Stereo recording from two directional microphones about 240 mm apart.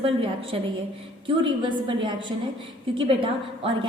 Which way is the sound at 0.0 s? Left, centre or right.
Right.